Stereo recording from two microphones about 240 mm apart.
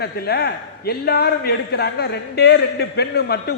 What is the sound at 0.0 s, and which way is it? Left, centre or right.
A man's voice, left.